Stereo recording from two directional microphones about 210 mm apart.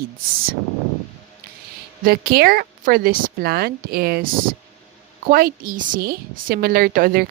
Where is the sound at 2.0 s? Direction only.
45° right (ahead or behind).